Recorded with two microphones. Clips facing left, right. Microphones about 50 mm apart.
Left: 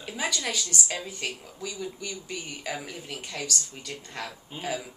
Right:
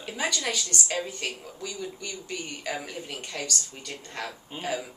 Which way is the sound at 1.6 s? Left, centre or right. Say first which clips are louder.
Left 1 dB; centre.